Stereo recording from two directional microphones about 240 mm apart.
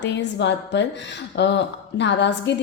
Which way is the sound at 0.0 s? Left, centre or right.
Left.